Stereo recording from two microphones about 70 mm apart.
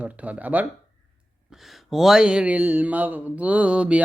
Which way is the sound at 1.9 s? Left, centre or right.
Centre.